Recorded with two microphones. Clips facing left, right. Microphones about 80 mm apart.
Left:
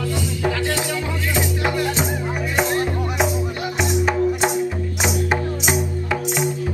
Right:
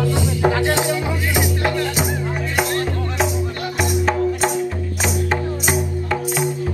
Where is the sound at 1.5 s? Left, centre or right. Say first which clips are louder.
Right 1 dB; centre.